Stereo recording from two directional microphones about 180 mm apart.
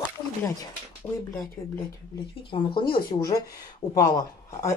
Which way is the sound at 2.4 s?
25° left (ahead or behind).